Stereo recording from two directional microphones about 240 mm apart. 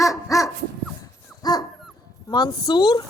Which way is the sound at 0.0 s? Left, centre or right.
Centre.